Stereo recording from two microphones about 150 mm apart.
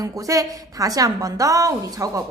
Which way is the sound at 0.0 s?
25° right (ahead or behind).